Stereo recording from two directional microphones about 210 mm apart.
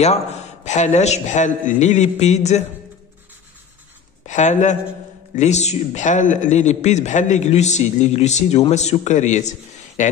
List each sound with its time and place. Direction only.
0.0 s a man's voice: 30° left (ahead or behind)
4.3 s a man's voice: 35° left (ahead or behind)